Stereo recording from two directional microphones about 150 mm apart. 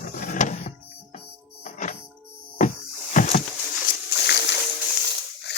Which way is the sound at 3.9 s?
70° left (ahead or behind).